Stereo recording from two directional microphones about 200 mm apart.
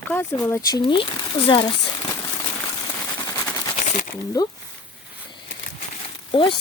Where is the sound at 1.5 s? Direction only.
25° left (ahead or behind).